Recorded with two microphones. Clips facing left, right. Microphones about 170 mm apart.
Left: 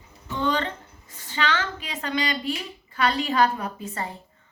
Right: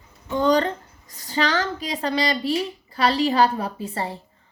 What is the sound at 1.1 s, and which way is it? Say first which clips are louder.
A woman's voice: right 4 dB; 40° right (ahead or behind).